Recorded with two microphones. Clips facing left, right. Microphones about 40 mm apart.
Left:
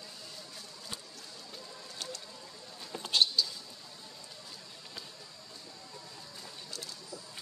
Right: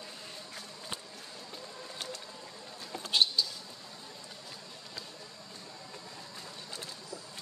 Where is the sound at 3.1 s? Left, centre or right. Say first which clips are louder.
Even; centre.